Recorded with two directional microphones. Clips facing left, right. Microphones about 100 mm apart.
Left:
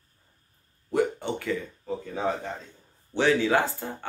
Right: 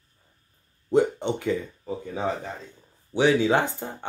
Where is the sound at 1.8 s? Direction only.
5° right (ahead or behind).